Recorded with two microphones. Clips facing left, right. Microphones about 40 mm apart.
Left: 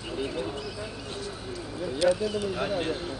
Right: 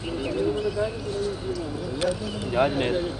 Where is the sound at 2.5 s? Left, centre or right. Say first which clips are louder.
Right 6 dB; right.